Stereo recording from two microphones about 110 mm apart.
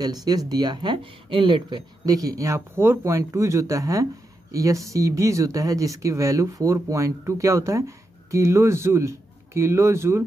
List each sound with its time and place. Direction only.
0.0 s speech: 35° right (ahead or behind)